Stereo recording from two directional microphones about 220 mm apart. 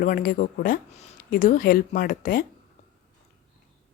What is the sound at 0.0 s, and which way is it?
Speech, 40° left (ahead or behind).